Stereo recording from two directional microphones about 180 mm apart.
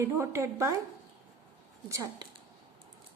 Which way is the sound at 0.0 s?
15° right (ahead or behind).